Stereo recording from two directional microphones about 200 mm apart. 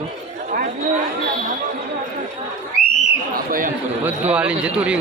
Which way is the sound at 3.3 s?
45° right (ahead or behind).